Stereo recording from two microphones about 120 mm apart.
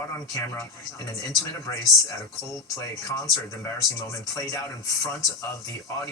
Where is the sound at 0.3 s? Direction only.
25° left (ahead or behind).